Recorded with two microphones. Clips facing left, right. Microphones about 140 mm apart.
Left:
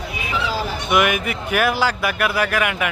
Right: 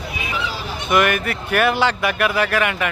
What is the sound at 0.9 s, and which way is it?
Speech, 10° left (ahead or behind).